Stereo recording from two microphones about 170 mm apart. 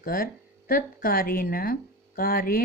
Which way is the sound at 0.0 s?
60° left (ahead or behind).